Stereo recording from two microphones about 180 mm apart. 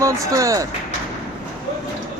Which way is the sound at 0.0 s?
15° right (ahead or behind).